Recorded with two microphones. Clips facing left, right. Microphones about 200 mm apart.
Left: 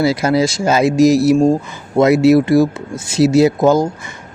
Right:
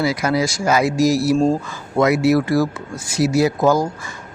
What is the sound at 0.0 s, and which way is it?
Speech, 30° left (ahead or behind).